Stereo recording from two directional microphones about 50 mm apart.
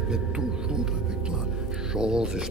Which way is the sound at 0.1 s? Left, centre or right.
Centre.